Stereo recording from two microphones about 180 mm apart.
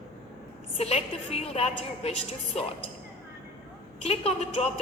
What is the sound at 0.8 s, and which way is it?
A woman's voice, 35° left (ahead or behind).